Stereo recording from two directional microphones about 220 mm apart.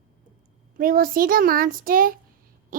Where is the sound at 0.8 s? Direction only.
40° right (ahead or behind).